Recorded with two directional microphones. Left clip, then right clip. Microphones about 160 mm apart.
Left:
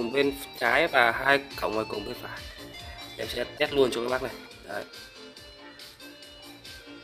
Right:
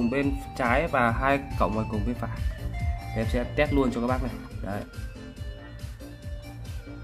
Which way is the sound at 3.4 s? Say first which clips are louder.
Left 1 dB; 20° left (ahead or behind).